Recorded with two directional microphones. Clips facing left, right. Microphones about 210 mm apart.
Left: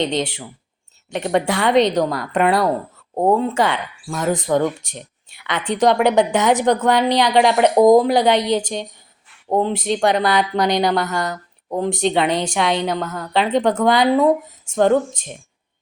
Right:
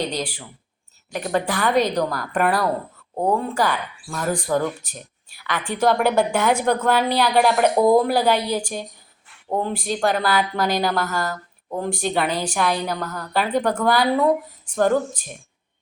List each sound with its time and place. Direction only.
0.0 s a woman's voice: 25° left (ahead or behind)